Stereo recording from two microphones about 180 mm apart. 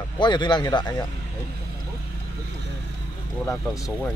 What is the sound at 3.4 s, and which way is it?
Speech, 20° left (ahead or behind).